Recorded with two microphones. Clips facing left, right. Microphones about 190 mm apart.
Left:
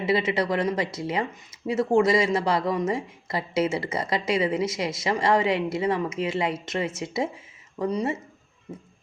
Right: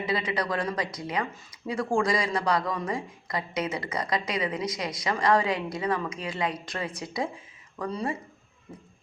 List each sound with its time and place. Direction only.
0.0 s speech: 25° left (ahead or behind)